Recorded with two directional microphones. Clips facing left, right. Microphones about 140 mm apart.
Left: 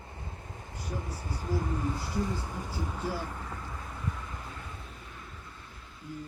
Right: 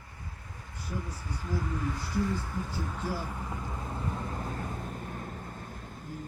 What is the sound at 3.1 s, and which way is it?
Speech, 5° right (ahead or behind).